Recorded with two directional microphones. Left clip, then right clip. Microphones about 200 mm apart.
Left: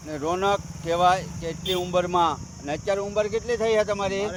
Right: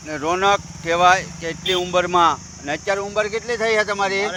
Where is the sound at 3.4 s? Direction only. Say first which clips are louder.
Right 3 dB; 35° right (ahead or behind).